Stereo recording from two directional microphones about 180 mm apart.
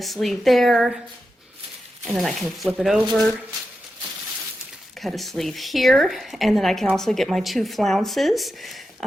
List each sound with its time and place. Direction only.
0.0 s a woman's voice: centre (ahead or behind)
2.0 s a woman's voice: centre (ahead or behind)
4.9 s a woman's voice: centre (ahead or behind)